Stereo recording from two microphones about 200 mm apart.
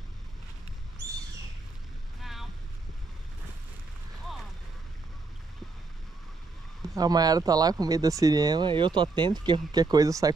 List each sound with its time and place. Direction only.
7.0 s speech: 20° right (ahead or behind)